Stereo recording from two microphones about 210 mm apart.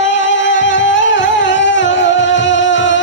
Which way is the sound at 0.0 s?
60° left (ahead or behind).